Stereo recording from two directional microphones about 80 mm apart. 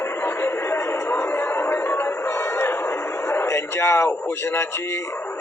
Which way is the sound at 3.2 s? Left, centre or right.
Left.